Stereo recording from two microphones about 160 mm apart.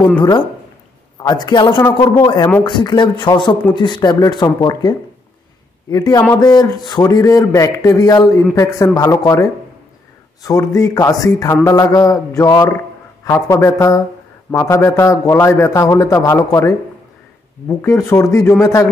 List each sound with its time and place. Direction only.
1.2 s a man's voice: 25° left (ahead or behind)